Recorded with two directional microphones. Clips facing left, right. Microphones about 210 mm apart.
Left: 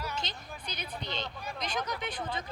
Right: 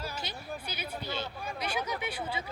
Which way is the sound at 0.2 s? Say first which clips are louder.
Right 3 dB; 10° right (ahead or behind).